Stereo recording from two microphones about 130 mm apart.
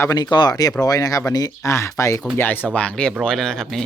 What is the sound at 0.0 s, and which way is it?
Speech, 30° left (ahead or behind).